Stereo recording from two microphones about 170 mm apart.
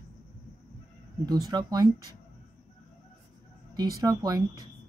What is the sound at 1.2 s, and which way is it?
Speech, 20° right (ahead or behind).